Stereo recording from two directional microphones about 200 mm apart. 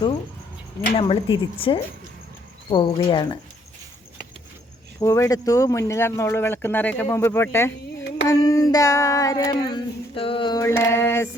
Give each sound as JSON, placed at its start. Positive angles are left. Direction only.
{"t": 0.9, "sound": "speech", "side_deg": 25}
{"t": 4.9, "sound": "child singing", "side_deg": 15}